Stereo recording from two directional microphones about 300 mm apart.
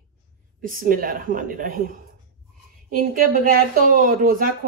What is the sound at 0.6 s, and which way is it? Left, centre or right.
A woman's voice, right.